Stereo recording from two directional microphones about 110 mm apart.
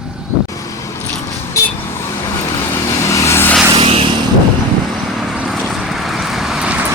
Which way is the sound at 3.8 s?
60° right (ahead or behind).